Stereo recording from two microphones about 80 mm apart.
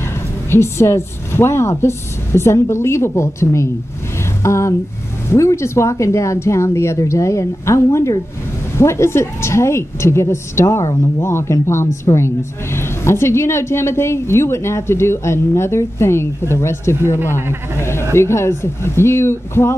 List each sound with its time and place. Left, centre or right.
0.5 s a woman's voice: left